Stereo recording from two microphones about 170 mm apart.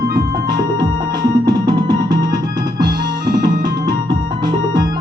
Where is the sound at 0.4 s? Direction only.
25° right (ahead or behind).